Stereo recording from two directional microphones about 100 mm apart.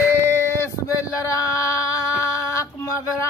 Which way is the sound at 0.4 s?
25° left (ahead or behind).